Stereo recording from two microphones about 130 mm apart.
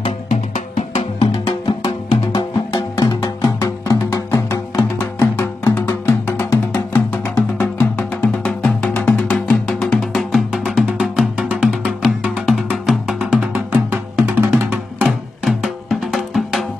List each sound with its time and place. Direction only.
0.3 s music: 65° left (ahead or behind)
1.7 s music: 35° left (ahead or behind); by 8.3 s 20° left (ahead or behind)
8.5 s music: 5° left (ahead or behind); by 15.0 s 15° right (ahead or behind)
15.4 s music: 5° right (ahead or behind)